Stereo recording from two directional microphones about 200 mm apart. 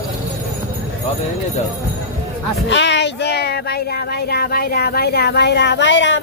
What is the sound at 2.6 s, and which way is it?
Speech, 60° left (ahead or behind).